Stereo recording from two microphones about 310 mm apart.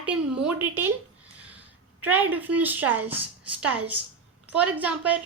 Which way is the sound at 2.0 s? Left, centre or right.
Centre.